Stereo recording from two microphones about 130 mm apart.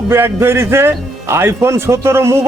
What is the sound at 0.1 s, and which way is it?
A man's voice, 20° right (ahead or behind).